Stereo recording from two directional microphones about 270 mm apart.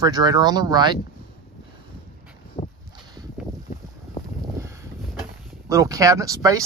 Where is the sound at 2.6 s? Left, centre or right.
Left.